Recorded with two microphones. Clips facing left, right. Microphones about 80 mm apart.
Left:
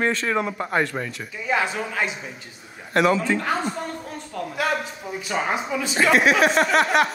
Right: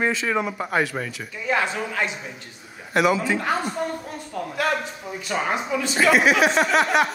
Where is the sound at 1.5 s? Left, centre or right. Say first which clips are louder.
Even; centre.